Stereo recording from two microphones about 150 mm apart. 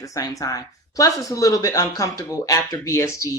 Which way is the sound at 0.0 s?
20° left (ahead or behind).